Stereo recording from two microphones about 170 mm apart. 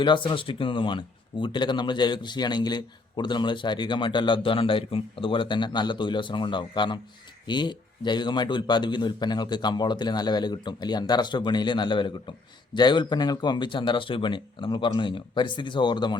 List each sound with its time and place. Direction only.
0.0 s speech: 25° left (ahead or behind)